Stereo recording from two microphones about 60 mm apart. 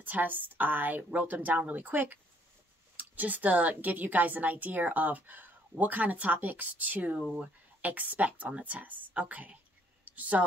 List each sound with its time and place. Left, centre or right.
0.0 s a woman's voice: right